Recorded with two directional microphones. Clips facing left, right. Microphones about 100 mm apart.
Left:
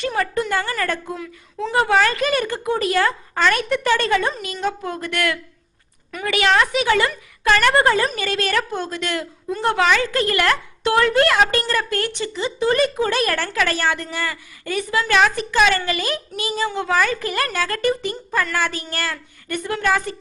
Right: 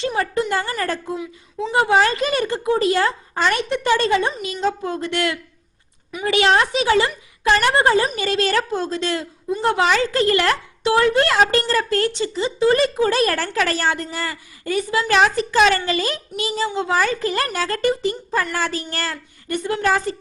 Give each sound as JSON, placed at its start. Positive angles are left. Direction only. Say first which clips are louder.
{"t": 0.0, "sound": "a woman's voice", "louder": "right 1 dB", "side_deg": -30}
{"t": 1.1, "sound": "a woman's voice", "louder": "right 3 dB", "side_deg": -15}
{"t": 4.6, "sound": "a woman's voice", "louder": "right 2 dB", "side_deg": -25}